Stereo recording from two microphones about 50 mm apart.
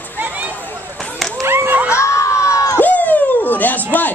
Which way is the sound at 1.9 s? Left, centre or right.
Left.